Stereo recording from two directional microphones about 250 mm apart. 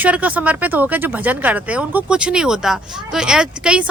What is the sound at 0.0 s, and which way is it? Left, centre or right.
Speech, centre.